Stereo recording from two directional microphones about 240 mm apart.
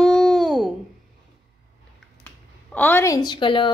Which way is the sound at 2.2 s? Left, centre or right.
Centre.